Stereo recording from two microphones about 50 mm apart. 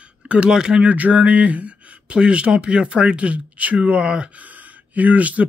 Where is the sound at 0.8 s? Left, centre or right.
Right.